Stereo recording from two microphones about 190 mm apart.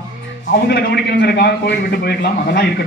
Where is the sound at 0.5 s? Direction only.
60° left (ahead or behind).